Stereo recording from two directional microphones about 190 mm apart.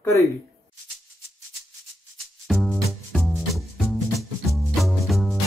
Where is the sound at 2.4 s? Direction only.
Centre (ahead or behind).